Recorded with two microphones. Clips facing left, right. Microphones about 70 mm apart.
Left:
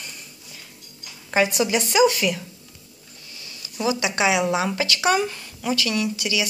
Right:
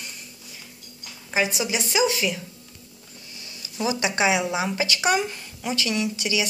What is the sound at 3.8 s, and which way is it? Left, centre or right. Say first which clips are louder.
Speech: left 1 dB; right.